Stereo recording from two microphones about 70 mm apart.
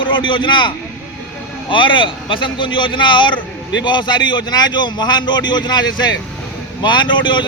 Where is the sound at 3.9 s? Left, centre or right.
Left.